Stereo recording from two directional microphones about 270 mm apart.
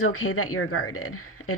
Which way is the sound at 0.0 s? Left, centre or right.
Left.